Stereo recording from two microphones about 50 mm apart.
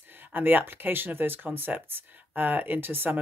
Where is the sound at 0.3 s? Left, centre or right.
Right.